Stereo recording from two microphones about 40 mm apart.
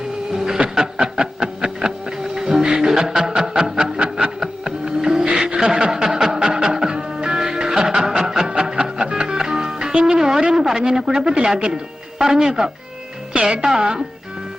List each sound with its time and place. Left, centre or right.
0.3 s printer: centre
0.8 s music: centre
10.5 s a sound: centre
12.2 s speech: centre